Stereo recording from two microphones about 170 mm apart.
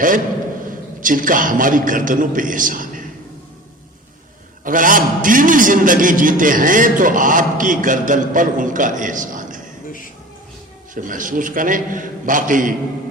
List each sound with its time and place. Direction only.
1.0 s a man's voice: 55° right (ahead or behind)
4.6 s a man's voice: 50° right (ahead or behind)
10.9 s a man's voice: 50° right (ahead or behind)